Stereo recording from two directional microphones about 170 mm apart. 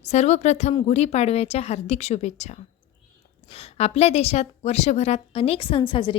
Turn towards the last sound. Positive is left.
turn(degrees=30)  # may be behind; listen again after turning